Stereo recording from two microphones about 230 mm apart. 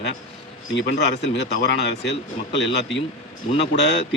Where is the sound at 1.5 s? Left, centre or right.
Left.